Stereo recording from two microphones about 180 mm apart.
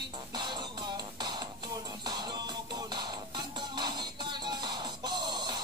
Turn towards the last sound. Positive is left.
turn(degrees=-25)  # may be behind; listen again after turning